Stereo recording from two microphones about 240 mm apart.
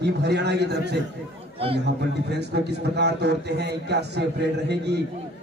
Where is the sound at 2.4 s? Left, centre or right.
Right.